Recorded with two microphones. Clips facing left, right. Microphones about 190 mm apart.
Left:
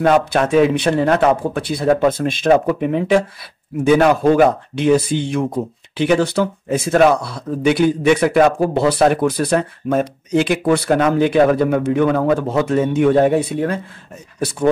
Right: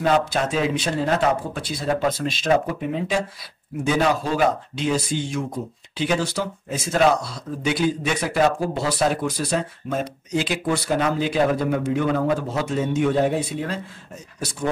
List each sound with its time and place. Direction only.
0.0 s speech: 55° left (ahead or behind)